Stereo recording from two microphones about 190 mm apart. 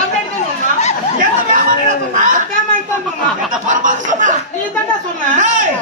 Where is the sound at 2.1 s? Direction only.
45° right (ahead or behind).